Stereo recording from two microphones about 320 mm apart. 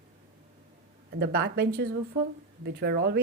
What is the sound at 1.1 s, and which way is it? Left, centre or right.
A woman's voice, right.